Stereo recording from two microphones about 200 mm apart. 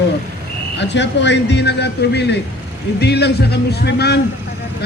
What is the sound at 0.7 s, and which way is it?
A man's voice, 60° left (ahead or behind).